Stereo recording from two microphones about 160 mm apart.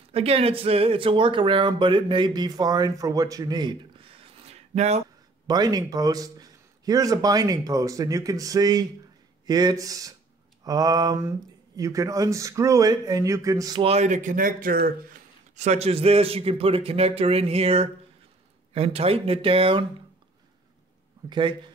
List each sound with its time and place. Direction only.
0.1 s speech: 40° right (ahead or behind)
5.5 s speech: 25° right (ahead or behind)
13.8 s speech: 45° right (ahead or behind); by 14.9 s 65° right (ahead or behind)
15.5 s speech: 45° right (ahead or behind)
21.3 s speech: 30° right (ahead or behind)